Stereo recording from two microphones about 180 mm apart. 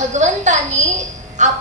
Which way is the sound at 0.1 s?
40° right (ahead or behind).